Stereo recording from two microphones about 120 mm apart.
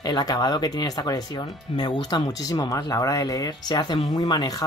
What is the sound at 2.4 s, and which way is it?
Speech, 30° left (ahead or behind).